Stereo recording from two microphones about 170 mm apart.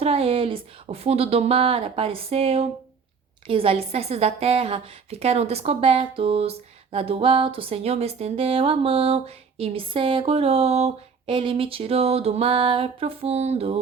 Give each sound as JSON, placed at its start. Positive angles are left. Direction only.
{"t": 0.0, "sound": "speech", "side_deg": -35}